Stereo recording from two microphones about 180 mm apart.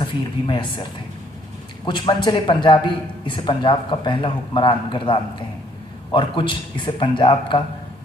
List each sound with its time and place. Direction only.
0.0 s a man's voice: 25° left (ahead or behind)